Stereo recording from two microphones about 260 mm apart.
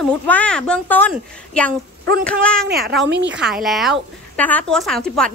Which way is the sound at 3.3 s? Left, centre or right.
Centre.